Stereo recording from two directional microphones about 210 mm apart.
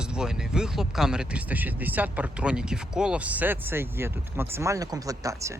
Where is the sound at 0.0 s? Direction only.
5° right (ahead or behind).